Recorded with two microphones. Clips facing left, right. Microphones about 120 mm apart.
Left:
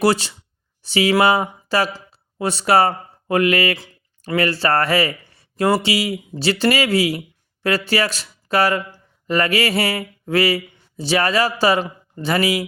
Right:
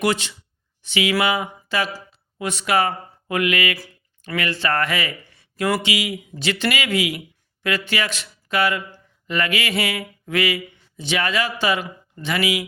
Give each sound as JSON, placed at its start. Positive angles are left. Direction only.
{"t": 0.0, "sound": "speech", "side_deg": 35}